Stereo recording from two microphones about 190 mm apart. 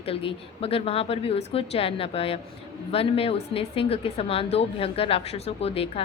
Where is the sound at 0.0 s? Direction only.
30° left (ahead or behind).